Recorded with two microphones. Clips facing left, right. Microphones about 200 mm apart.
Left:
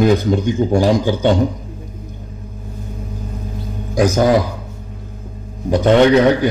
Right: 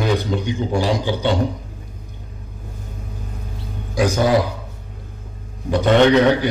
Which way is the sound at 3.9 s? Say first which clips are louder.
Left 4 dB; 45° left (ahead or behind).